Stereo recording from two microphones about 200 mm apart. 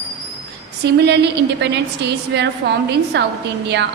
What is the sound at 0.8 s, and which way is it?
A woman's voice, 55° right (ahead or behind).